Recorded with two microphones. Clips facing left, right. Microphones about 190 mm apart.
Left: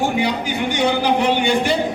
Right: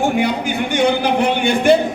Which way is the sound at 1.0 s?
50° right (ahead or behind).